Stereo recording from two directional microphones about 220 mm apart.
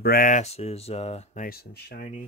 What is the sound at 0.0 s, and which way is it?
Speech, 40° left (ahead or behind).